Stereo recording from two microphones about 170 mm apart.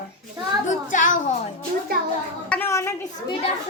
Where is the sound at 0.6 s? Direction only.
50° left (ahead or behind).